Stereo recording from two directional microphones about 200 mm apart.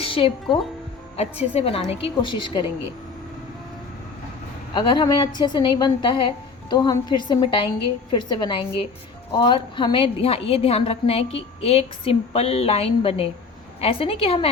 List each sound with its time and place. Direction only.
0.0 s music: 30° left (ahead or behind)
1.5 s a woman's voice: 30° left (ahead or behind)
4.7 s a woman's voice: 25° left (ahead or behind)